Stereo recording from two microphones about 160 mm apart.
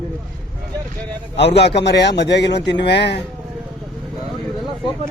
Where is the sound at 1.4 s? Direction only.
90° left.